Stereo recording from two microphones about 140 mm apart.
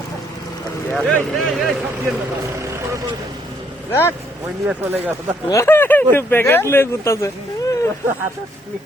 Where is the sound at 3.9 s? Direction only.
15° left (ahead or behind).